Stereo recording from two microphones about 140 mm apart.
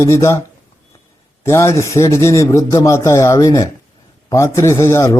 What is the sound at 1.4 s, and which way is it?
Speech, 20° left (ahead or behind).